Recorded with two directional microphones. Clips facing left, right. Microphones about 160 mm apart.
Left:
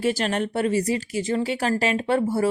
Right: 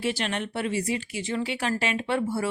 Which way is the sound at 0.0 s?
45° left (ahead or behind).